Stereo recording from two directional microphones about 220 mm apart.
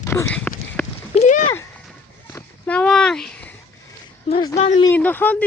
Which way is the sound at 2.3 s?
10° left (ahead or behind).